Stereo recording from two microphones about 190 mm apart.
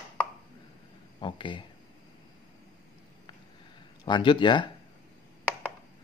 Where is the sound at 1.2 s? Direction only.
25° left (ahead or behind).